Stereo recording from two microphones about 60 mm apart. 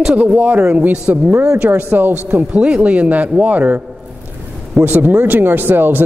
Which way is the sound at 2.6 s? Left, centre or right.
Centre.